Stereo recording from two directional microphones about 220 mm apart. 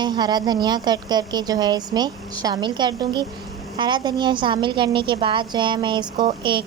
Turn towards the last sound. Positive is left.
turn(degrees=-20)  # may be behind; listen again after turning